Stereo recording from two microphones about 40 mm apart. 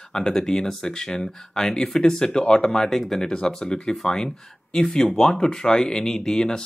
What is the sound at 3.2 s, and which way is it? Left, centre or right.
Speech, left.